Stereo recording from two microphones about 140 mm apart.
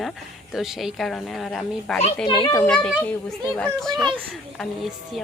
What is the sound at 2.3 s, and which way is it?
Speech, 35° left (ahead or behind).